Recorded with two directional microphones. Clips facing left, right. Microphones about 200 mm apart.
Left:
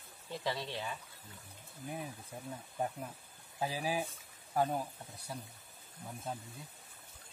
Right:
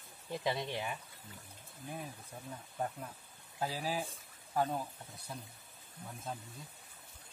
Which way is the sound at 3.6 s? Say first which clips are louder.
Left 1 dB; 15° left (ahead or behind).